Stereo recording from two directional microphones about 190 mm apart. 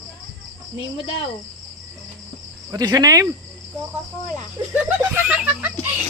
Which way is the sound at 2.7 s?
20° right (ahead or behind).